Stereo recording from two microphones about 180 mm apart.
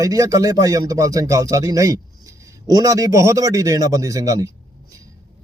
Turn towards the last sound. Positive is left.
turn(degrees=-20)  # may be behind; listen again after turning